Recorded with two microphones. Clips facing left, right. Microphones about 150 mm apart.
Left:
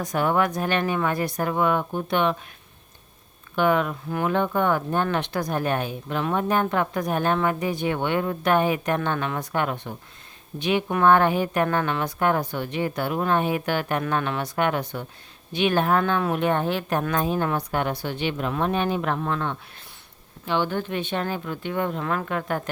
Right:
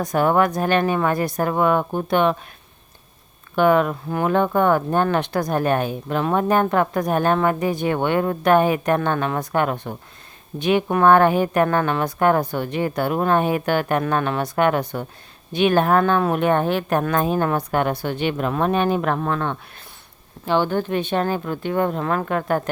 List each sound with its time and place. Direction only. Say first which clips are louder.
0.1 s speech: right 4 dB; 45° right (ahead or behind)
3.5 s speech: right 5 dB; 45° right (ahead or behind)
20.5 s speech: right 5 dB; 40° right (ahead or behind)